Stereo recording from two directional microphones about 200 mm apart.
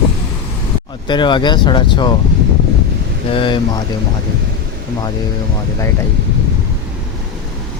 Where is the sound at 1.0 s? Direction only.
20° left (ahead or behind).